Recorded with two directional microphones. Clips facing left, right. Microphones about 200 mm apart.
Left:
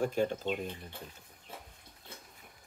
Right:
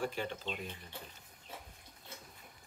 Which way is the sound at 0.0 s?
45° left (ahead or behind).